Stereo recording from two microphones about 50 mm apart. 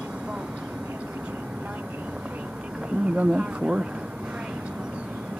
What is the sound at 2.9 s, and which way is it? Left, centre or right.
Speech, right.